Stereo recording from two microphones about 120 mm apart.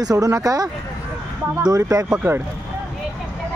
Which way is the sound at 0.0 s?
30° right (ahead or behind).